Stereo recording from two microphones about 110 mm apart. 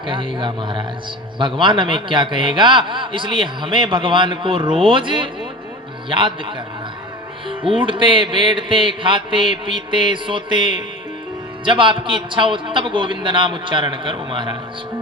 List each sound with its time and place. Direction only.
0.0 s a man's voice: 50° right (ahead or behind)